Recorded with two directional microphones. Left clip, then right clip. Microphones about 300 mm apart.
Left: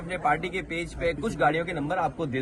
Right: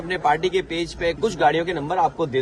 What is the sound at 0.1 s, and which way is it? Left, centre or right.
Speech, centre.